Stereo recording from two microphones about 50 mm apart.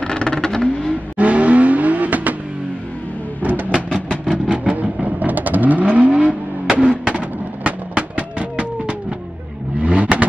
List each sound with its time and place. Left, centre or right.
0.0 s vehicle: centre
1.1 s vehicle: right
3.7 s music: centre
4.8 s vehicle: right
6.7 s music: centre
9.8 s vehicle: right